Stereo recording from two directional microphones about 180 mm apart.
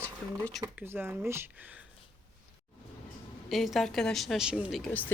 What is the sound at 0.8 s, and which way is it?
Speech, 10° right (ahead or behind).